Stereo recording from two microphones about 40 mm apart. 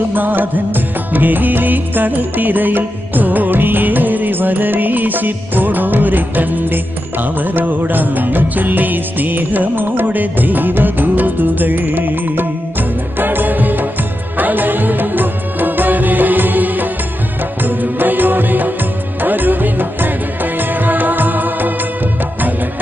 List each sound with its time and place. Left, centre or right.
0.1 s music: right